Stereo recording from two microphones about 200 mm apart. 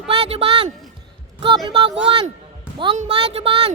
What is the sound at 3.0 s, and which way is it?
Speech, 30° right (ahead or behind).